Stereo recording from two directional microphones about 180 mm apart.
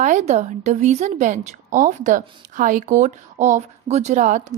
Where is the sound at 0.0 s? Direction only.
45° right (ahead or behind).